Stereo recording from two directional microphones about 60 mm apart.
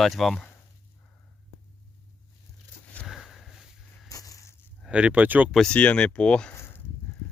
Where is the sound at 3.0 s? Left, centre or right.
Centre.